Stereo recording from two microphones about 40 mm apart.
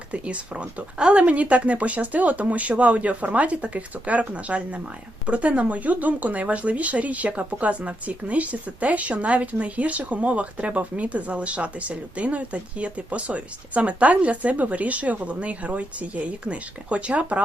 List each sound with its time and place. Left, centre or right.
0.1 s speech: right